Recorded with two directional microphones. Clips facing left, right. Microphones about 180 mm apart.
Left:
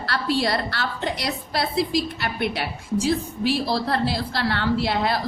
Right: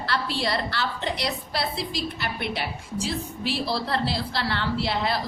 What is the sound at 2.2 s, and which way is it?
A woman's voice, 45° left (ahead or behind).